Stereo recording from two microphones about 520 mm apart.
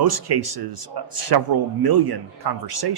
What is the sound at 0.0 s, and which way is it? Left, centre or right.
A man's voice, right.